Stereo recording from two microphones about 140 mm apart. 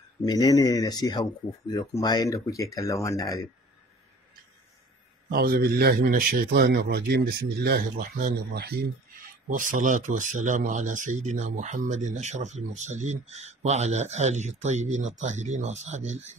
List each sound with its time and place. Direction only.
0.2 s speech: 25° left (ahead or behind)
5.3 s a man's voice: 90° right; by 8.4 s 75° right (ahead or behind)
9.5 s speech: 65° right (ahead or behind)